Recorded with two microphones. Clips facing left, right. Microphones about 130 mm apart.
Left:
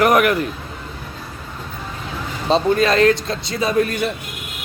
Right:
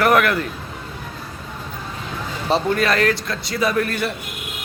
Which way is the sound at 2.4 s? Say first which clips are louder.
Left 3 dB; 20° left (ahead or behind).